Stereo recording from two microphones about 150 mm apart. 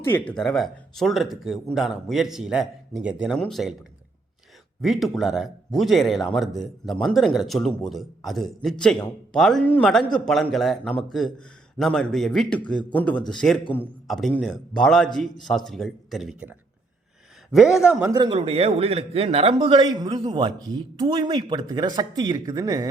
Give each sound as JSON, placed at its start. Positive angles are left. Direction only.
{"t": 0.0, "sound": "speech", "side_deg": 15}
{"t": 0.3, "sound": "speech", "side_deg": 5}
{"t": 3.3, "sound": "speech", "side_deg": 5}
{"t": 4.8, "sound": "speech", "side_deg": 0}
{"t": 14.1, "sound": "speech", "side_deg": 0}
{"t": 17.7, "sound": "speech", "side_deg": -5}
{"t": 18.0, "sound": "a man's voice", "side_deg": -25}
{"t": 18.3, "sound": "a man's voice", "side_deg": -40}